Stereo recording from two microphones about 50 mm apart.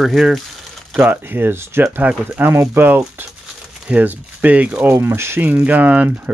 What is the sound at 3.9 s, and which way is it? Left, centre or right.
Speech, right.